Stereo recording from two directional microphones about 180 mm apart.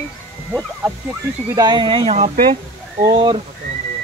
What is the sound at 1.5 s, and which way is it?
Speech, 20° right (ahead or behind).